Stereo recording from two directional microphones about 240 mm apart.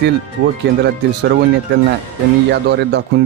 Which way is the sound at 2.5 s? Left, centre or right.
Right.